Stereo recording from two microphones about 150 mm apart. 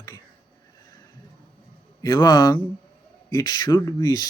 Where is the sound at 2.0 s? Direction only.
25° left (ahead or behind).